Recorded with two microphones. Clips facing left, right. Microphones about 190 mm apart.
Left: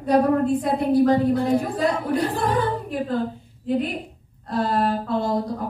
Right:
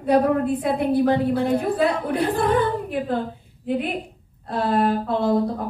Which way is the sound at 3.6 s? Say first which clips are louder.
Left 1 dB; 60° right (ahead or behind).